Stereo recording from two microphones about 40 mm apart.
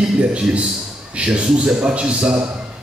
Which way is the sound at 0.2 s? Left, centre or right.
Right.